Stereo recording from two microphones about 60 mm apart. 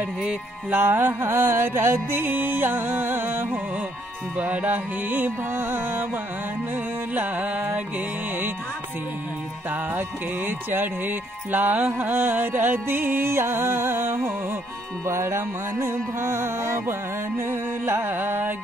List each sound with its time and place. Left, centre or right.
0.0 s music: centre
0.7 s music: right
4.4 s music: right
9.7 s music: right